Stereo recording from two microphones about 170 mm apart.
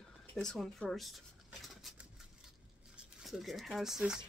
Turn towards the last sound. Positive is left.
turn(degrees=-5)  # may be behind; listen again after turning